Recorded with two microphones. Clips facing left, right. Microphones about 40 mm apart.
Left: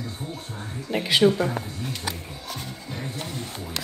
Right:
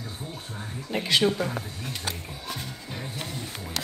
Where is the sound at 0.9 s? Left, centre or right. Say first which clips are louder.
Left 4 dB; centre.